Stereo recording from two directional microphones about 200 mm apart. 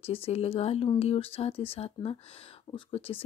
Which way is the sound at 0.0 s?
30° left (ahead or behind).